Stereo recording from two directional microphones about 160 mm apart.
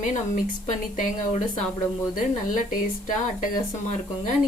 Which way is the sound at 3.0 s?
55° left (ahead or behind).